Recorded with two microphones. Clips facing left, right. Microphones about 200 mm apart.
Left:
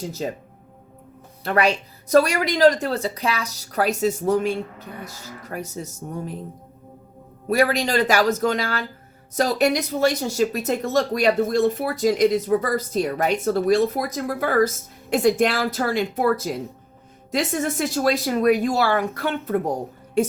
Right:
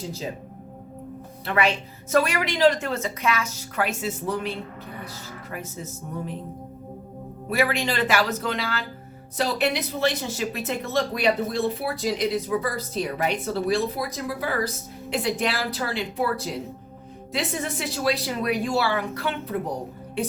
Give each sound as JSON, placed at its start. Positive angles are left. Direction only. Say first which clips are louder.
{"t": 0.2, "sound": "speech", "louder": "left 6 dB", "side_deg": 50}
{"t": 1.5, "sound": "speech", "louder": "left 3 dB", "side_deg": 40}
{"t": 7.5, "sound": "speech", "louder": "left 5 dB", "side_deg": 40}